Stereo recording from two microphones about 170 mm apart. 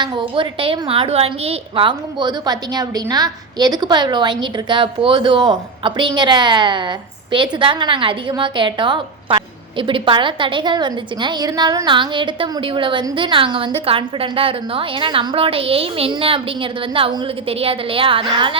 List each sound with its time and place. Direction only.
0.0 s a woman's voice: 25° right (ahead or behind)